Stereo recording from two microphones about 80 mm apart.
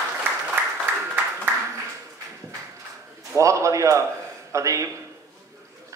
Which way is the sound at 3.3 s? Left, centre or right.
Right.